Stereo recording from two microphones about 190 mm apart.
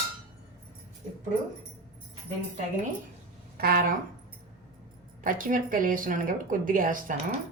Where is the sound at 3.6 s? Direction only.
50° right (ahead or behind).